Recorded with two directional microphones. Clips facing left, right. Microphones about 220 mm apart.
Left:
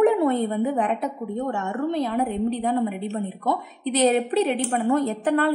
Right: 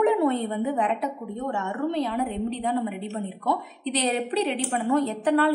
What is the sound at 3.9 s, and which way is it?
A woman's voice, 45° left (ahead or behind).